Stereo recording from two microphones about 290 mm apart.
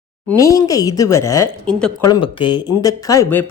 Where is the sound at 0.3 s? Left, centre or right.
Centre.